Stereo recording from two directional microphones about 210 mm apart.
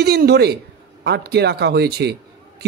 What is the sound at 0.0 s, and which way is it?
A man's voice, 50° right (ahead or behind).